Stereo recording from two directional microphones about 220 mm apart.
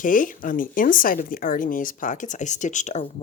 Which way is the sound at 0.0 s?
35° left (ahead or behind).